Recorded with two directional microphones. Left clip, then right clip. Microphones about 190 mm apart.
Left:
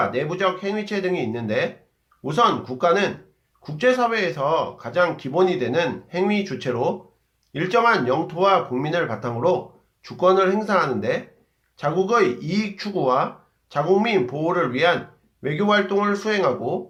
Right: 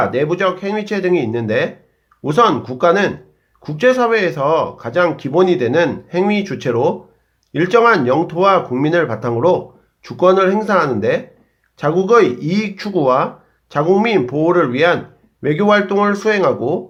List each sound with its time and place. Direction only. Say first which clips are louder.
0.0 s speech: right 6 dB; 30° right (ahead or behind)